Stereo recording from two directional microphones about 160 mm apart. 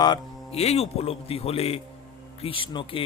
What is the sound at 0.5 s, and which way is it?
Speech, 40° left (ahead or behind).